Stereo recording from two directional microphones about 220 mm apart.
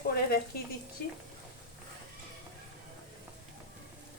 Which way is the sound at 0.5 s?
45° left (ahead or behind).